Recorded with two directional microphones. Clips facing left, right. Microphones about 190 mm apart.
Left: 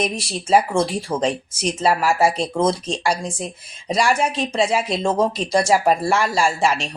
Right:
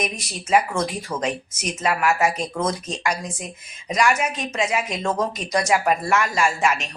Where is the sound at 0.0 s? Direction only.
30° left (ahead or behind).